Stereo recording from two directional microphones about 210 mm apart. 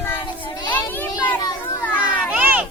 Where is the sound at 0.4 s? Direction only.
20° left (ahead or behind).